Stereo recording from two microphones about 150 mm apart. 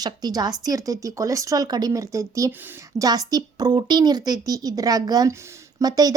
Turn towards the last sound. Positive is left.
turn(degrees=-25)  # may be behind; listen again after turning